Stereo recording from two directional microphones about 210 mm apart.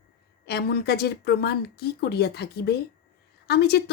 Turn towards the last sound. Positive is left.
turn(degrees=50)  # may be behind; listen again after turning